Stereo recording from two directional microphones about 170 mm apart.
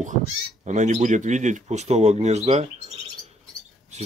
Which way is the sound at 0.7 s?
45° right (ahead or behind).